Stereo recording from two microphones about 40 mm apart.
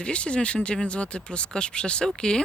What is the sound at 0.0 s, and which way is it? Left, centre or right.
Speech, left.